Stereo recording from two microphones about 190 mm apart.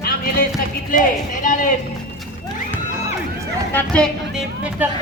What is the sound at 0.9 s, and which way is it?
Speech, 45° left (ahead or behind).